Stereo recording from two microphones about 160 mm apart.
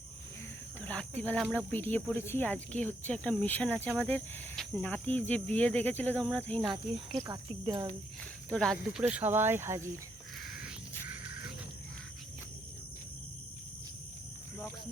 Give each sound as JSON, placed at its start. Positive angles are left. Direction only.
{"t": 0.8, "sound": "cricket", "side_deg": 10}
{"t": 1.2, "sound": "speech", "side_deg": 5}
{"t": 7.2, "sound": "speech", "side_deg": -25}
{"t": 8.4, "sound": "speech", "side_deg": 0}